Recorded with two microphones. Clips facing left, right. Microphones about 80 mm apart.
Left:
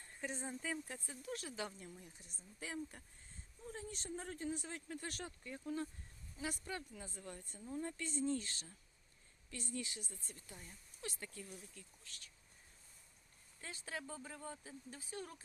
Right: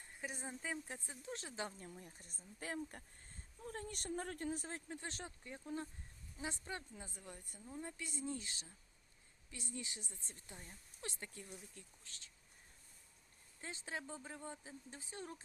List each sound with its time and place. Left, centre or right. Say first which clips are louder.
0.0 s a sound: left 2 dB; centre
0.6 s speech: left 1 dB; right
4.9 s speech: left 1 dB; right
13.6 s speech: right 1 dB; right